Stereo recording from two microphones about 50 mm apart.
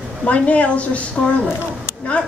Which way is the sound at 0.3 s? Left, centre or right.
Left.